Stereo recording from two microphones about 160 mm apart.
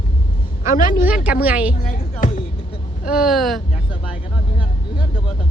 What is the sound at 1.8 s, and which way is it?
Music, 55° left (ahead or behind).